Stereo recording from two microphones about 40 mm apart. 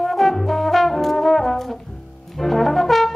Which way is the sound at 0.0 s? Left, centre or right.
Centre.